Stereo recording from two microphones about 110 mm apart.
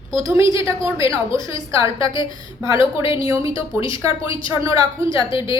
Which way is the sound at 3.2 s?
30° right (ahead or behind).